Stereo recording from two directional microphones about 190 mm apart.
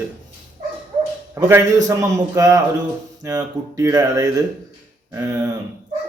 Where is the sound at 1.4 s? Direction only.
15° right (ahead or behind).